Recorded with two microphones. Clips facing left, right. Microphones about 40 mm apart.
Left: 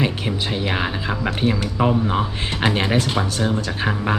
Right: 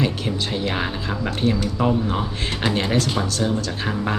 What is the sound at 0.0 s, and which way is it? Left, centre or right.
Speech, centre.